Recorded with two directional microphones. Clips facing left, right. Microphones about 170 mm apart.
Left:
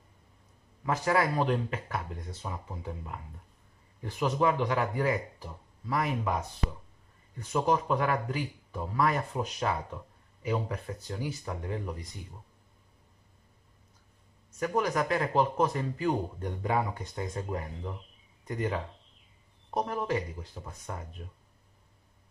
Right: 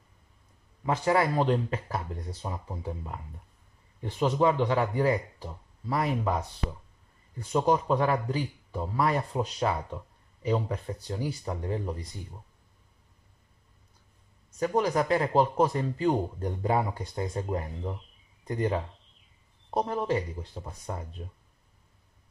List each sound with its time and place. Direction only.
0.8 s speech: 25° right (ahead or behind)
7.3 s speech: 30° right (ahead or behind)
14.6 s speech: 30° right (ahead or behind)